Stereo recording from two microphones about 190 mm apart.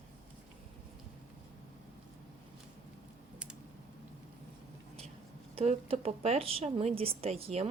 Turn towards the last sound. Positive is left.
turn(degrees=-30)  # may be behind; listen again after turning